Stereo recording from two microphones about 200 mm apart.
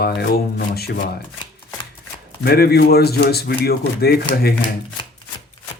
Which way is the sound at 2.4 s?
50° left (ahead or behind).